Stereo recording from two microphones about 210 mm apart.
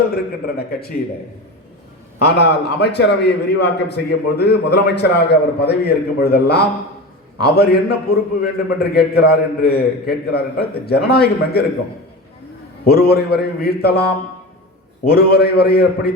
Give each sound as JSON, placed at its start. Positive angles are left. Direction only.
{"t": 0.4, "sound": "a man's voice", "side_deg": 45}
{"t": 2.1, "sound": "a man's voice", "side_deg": 50}
{"t": 12.8, "sound": "a man's voice", "side_deg": 50}